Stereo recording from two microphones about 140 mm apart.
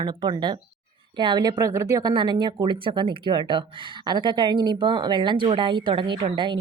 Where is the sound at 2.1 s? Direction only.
35° right (ahead or behind).